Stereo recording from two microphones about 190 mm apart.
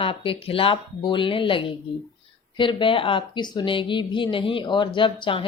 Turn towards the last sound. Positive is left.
turn(degrees=25)  # may be behind; listen again after turning